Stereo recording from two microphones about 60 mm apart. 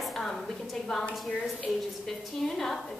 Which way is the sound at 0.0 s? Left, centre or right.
Centre.